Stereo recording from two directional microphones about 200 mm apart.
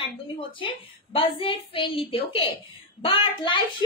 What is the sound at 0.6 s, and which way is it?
A woman's voice, 25° left (ahead or behind).